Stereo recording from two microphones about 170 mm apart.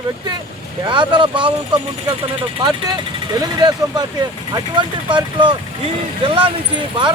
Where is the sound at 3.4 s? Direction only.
25° right (ahead or behind).